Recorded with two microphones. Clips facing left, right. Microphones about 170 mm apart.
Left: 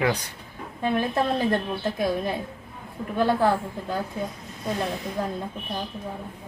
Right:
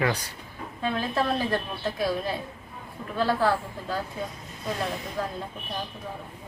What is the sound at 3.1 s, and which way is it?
Speech, 20° left (ahead or behind).